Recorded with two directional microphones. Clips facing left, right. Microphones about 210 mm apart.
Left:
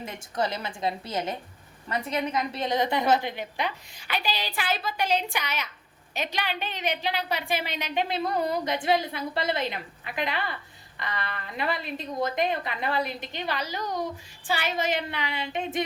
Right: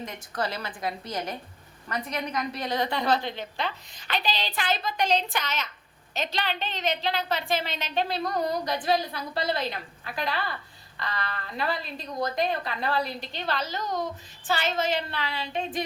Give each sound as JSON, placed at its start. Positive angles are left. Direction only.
{"t": 0.0, "sound": "a woman's voice", "side_deg": 20}